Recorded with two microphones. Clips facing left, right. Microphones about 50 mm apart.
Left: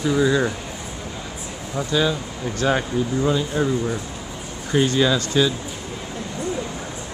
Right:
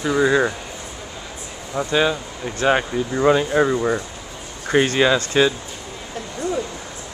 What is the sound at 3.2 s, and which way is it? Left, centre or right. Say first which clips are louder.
Speech: right 9 dB; right.